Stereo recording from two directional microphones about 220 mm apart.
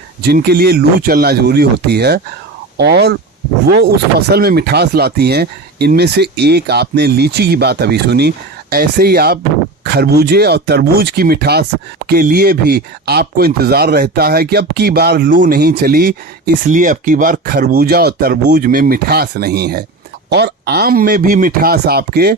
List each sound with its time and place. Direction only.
0.2 s speech: 45° right (ahead or behind)
4.3 s speech: 45° right (ahead or behind)